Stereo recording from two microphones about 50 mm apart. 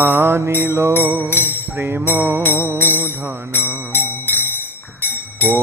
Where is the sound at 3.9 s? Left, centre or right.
Left.